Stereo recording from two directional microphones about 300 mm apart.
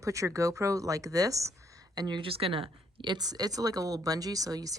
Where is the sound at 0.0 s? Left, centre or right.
Centre.